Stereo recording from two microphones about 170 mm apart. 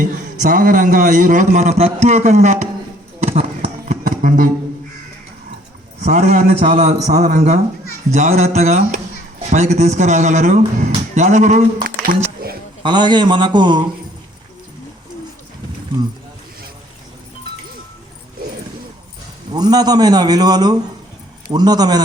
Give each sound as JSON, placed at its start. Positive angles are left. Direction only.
{"t": 0.0, "sound": "a man's voice", "side_deg": -55}
{"t": 3.2, "sound": "a sound", "side_deg": -40}
{"t": 4.0, "sound": "music", "side_deg": -50}
{"t": 6.0, "sound": "a man's voice", "side_deg": -45}
{"t": 11.1, "sound": "a sound", "side_deg": -45}
{"t": 12.8, "sound": "a man's voice", "side_deg": -25}
{"t": 19.5, "sound": "a man's voice", "side_deg": -25}